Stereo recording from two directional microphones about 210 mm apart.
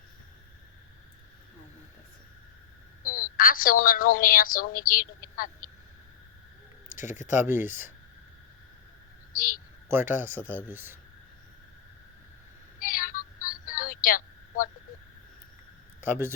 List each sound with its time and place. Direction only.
3.0 s a woman's voice: 40° left (ahead or behind)
6.9 s speech: 35° left (ahead or behind)
7.3 s speech: 10° right (ahead or behind)
9.3 s a woman's voice: 40° left (ahead or behind)
9.9 s speech: 10° right (ahead or behind)
12.8 s child singing: 40° left (ahead or behind)
16.0 s a man's voice: 10° right (ahead or behind)